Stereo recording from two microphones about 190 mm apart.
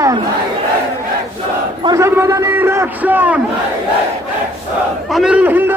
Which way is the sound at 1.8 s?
15° right (ahead or behind).